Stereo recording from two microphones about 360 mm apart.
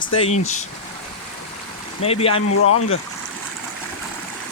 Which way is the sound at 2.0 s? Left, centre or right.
Centre.